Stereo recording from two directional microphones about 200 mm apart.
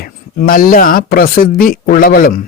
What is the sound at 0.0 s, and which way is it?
A man's voice, 45° left (ahead or behind).